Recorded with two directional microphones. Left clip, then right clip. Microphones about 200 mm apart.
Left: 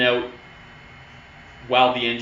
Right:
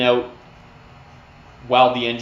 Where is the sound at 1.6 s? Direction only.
60° right (ahead or behind).